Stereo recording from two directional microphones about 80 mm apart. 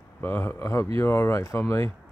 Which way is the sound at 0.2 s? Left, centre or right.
Left.